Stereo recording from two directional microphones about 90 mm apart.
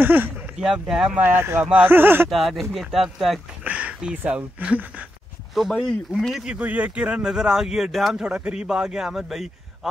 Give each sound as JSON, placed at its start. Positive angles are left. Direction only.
{"t": 0.0, "sound": "speech", "side_deg": -20}
{"t": 0.6, "sound": "speech", "side_deg": -10}
{"t": 1.2, "sound": "speech", "side_deg": -25}
{"t": 1.6, "sound": "speech", "side_deg": -15}
{"t": 2.2, "sound": "speech", "side_deg": 0}
{"t": 3.6, "sound": "speech", "side_deg": -15}
{"t": 5.5, "sound": "speech", "side_deg": 0}
{"t": 6.5, "sound": "speech", "side_deg": -15}